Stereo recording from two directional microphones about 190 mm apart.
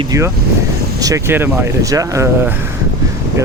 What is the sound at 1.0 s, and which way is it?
Speech, 15° right (ahead or behind).